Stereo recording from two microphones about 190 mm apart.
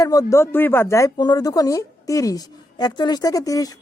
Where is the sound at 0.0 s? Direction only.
20° left (ahead or behind).